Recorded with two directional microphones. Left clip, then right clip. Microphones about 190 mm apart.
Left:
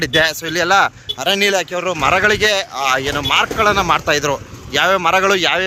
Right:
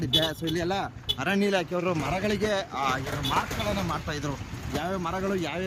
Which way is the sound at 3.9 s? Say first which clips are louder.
Left 17 dB; 50° left (ahead or behind).